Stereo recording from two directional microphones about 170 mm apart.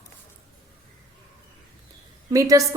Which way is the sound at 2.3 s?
20° right (ahead or behind).